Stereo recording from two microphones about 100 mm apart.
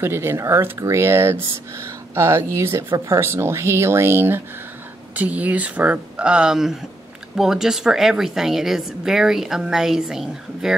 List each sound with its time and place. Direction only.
0.0 s a woman's voice: 25° right (ahead or behind); by 10.8 s 5° right (ahead or behind)